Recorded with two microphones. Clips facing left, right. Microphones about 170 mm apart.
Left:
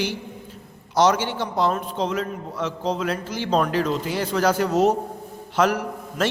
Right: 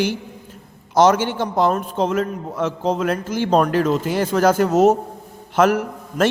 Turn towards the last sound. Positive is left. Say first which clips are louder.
# right 5 dB
turn(degrees=-50)  # may be behind; listen again after turning